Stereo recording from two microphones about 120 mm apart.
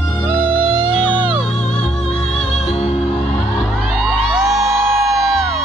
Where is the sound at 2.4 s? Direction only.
65° left (ahead or behind).